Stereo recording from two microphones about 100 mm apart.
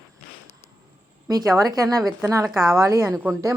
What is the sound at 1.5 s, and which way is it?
A woman's voice, 35° right (ahead or behind).